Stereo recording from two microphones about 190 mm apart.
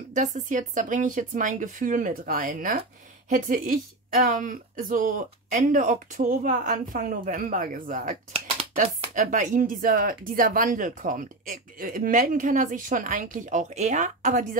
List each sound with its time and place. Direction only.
0.1 s speech: 40° right (ahead or behind)